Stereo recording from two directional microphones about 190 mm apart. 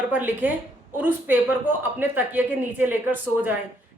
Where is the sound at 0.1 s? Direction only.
10° right (ahead or behind).